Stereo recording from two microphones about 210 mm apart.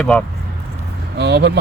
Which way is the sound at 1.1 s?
55° right (ahead or behind).